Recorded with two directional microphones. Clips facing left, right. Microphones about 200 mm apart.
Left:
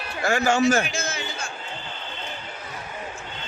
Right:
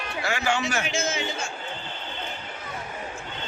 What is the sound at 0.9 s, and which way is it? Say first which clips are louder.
Speech: right 3 dB; 25° right (ahead or behind).